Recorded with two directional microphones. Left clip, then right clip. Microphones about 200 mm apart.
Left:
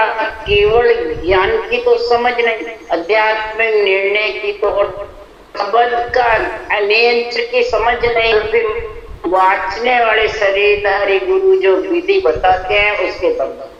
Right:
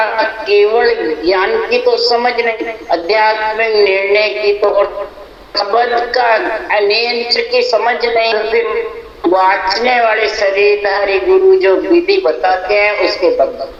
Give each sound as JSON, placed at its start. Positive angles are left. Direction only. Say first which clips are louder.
{"t": 0.0, "sound": "speech", "louder": "right 2 dB", "side_deg": -40}